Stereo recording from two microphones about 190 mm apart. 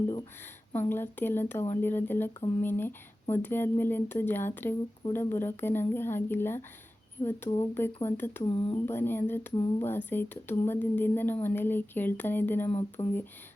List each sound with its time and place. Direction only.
0.7 s speech: 10° left (ahead or behind)
8.4 s speech: 30° left (ahead or behind)
8.9 s speech: 10° left (ahead or behind)